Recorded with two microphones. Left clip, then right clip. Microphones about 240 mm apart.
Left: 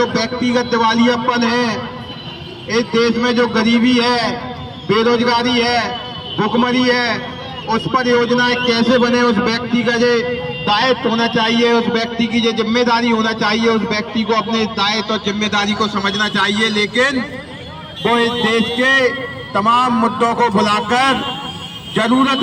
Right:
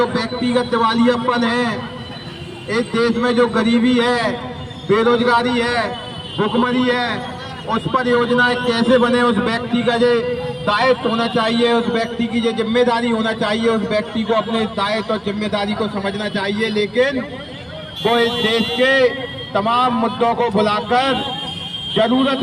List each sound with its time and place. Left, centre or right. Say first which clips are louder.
0.0 s a man's voice: left 2 dB; left